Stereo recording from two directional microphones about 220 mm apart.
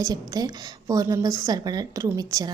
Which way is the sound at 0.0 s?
15° right (ahead or behind).